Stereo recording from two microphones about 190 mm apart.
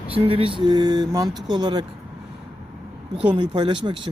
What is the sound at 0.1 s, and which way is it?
Speech, 30° right (ahead or behind).